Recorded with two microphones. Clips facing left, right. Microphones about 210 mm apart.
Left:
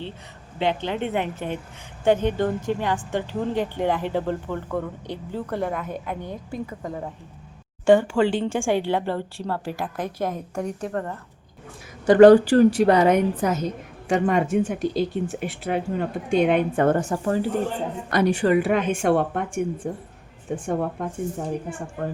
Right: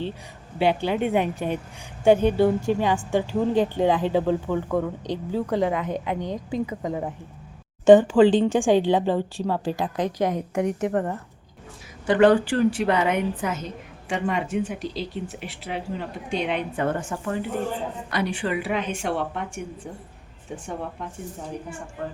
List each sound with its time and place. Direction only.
0.6 s a woman's voice: 10° right (ahead or behind)
12.0 s a woman's voice: 40° left (ahead or behind)